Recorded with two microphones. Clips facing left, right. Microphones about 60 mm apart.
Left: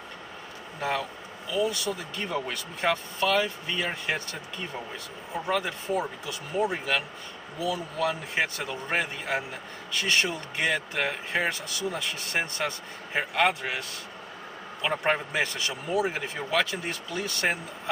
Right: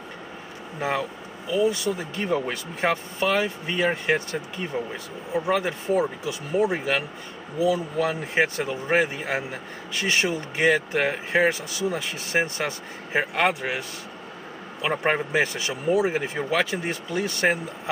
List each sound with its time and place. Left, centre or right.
0.7 s speech: centre